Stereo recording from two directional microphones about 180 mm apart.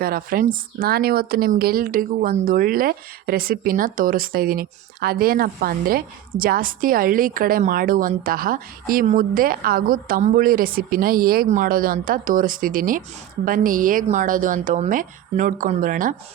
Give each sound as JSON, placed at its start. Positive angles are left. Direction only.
{"t": 0.0, "sound": "speech", "side_deg": -55}